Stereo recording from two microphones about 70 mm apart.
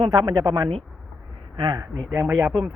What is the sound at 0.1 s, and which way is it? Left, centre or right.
Speech, right.